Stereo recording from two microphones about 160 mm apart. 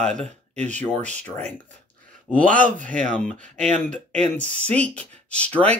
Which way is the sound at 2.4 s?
55° right (ahead or behind).